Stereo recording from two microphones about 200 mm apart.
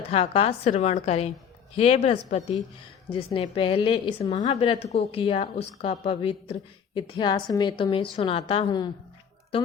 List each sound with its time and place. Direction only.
0.1 s a woman's voice: 30° left (ahead or behind)